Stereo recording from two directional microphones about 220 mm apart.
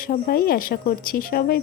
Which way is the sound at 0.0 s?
40° left (ahead or behind).